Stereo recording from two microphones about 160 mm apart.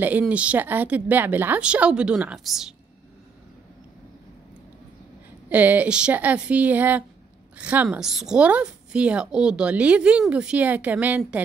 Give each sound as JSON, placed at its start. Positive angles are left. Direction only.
{"t": 0.0, "sound": "a woman's voice", "side_deg": -10}
{"t": 5.5, "sound": "a woman's voice", "side_deg": -10}